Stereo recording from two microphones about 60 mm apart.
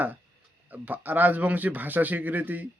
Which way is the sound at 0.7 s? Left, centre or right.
Right.